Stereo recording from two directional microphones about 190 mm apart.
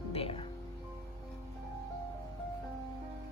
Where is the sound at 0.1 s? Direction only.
30° left (ahead or behind).